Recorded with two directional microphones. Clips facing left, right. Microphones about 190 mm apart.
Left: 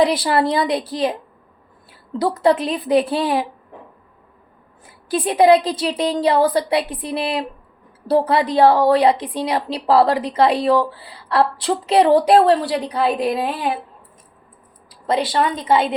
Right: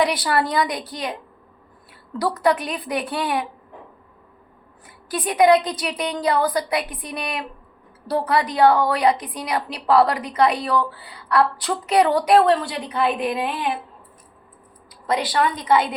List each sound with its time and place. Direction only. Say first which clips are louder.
0.0 s a woman's voice: left 4 dB; 25° left (ahead or behind)
5.0 s a woman's voice: left 3 dB; 30° left (ahead or behind)
14.8 s a woman's voice: left 3 dB; 30° left (ahead or behind)